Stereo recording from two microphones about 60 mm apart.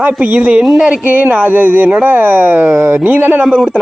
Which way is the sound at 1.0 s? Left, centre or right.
Right.